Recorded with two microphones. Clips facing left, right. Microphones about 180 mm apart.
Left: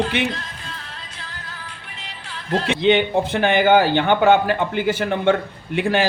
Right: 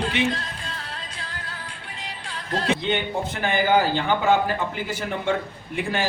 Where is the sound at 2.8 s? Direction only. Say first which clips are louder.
Left 8 dB; 75° left (ahead or behind).